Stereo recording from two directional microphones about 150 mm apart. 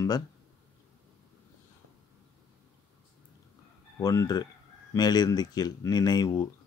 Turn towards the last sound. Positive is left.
turn(degrees=25)  # may be behind; listen again after turning